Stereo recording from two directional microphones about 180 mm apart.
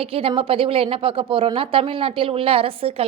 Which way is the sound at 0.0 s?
30° right (ahead or behind).